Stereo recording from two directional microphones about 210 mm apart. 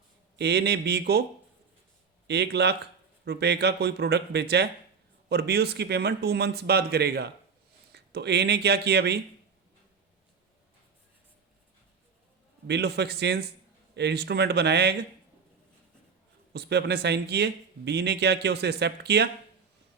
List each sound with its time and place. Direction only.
0.3 s speech: 55° right (ahead or behind)
2.2 s speech: 50° right (ahead or behind)
12.6 s speech: 55° right (ahead or behind)
16.5 s speech: 50° right (ahead or behind)